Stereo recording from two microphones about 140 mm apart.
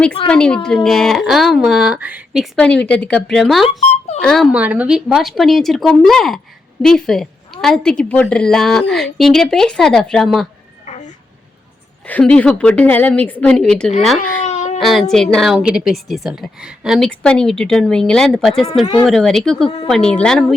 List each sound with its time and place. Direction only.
0.3 s speech: 5° left (ahead or behind)
2.6 s speech: 10° left (ahead or behind)
4.5 s speech: 10° right (ahead or behind)
10.9 s a sound: 60° left (ahead or behind)
12.0 s a woman's voice: 10° left (ahead or behind)
14.4 s baby cry: 55° left (ahead or behind)
14.8 s speech: centre (ahead or behind)
17.1 s speech: 5° left (ahead or behind)
19.6 s a woman's voice: 40° left (ahead or behind)
19.9 s speech: 5° left (ahead or behind)